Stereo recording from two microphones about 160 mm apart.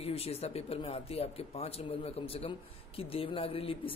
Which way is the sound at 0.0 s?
40° left (ahead or behind).